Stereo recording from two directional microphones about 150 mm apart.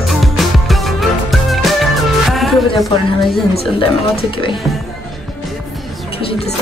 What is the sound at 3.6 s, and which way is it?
Speech, 40° left (ahead or behind).